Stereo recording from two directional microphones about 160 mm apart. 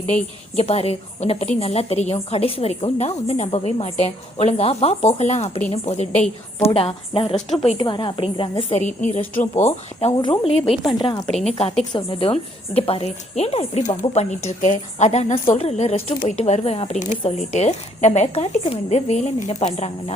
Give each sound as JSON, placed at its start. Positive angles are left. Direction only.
{"t": 0.1, "sound": "a woman's voice", "side_deg": 40}
{"t": 8.8, "sound": "speech", "side_deg": 50}
{"t": 10.2, "sound": "a woman's voice", "side_deg": 35}
{"t": 11.3, "sound": "a woman's voice", "side_deg": 5}
{"t": 11.9, "sound": "a woman's voice", "side_deg": 35}